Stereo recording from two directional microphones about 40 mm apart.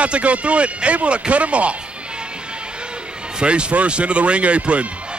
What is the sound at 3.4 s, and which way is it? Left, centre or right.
Speech, right.